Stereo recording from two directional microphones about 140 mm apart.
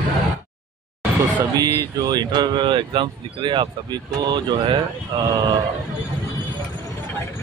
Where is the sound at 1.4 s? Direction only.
30° right (ahead or behind).